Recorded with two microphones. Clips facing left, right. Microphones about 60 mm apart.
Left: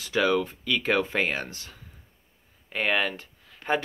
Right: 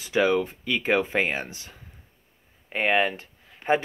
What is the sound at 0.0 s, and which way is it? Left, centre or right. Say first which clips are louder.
Speech: right 2 dB; right.